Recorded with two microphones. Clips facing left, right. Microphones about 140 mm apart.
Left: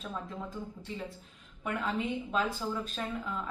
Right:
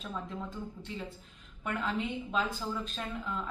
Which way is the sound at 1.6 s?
Centre (ahead or behind).